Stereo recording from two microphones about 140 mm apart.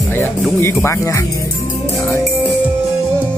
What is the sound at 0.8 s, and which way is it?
Speech, 20° left (ahead or behind).